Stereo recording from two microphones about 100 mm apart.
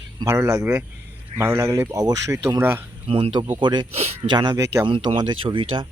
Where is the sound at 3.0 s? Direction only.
80° right.